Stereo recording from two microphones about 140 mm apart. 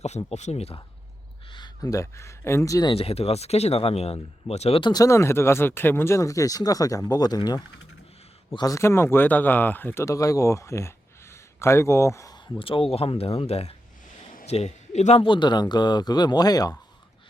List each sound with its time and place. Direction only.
0.3 s speech: 50° left (ahead or behind)
1.5 s speech: 30° left (ahead or behind)
2.9 s speech: 45° left (ahead or behind)
4.8 s speech: 25° left (ahead or behind)
12.5 s a man's voice: 40° left (ahead or behind)
15.2 s speech: 35° left (ahead or behind)